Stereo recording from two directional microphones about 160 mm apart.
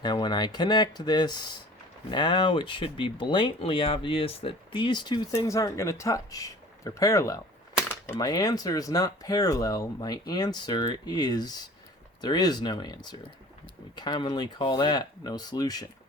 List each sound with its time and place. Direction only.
0.0 s speech: 25° left (ahead or behind)